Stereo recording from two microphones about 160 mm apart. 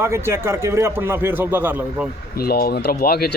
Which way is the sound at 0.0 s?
15° right (ahead or behind).